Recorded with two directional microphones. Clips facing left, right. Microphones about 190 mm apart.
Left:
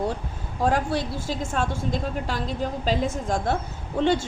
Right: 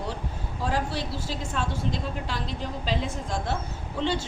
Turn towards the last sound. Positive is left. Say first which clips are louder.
# left 6 dB
turn(degrees=50)  # may be behind; listen again after turning